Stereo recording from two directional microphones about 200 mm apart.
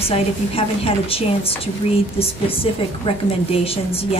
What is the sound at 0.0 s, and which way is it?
A woman's voice, 30° left (ahead or behind).